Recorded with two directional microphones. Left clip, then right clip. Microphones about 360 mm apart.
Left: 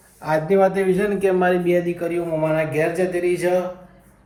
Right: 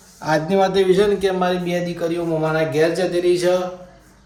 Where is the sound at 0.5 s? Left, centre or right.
Centre.